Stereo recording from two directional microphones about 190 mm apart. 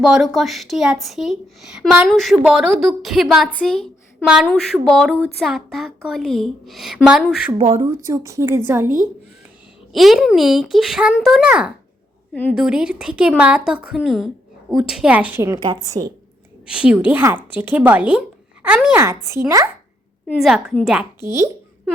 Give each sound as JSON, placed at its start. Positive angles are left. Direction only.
{"t": 0.0, "sound": "speech", "side_deg": 0}
{"t": 7.8, "sound": "a woman's voice", "side_deg": -15}
{"t": 9.9, "sound": "a woman's voice", "side_deg": 0}
{"t": 16.7, "sound": "a woman's voice", "side_deg": -5}
{"t": 20.2, "sound": "speech", "side_deg": 0}